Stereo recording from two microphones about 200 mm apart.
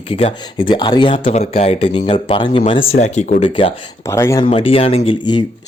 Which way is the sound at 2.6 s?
35° left (ahead or behind).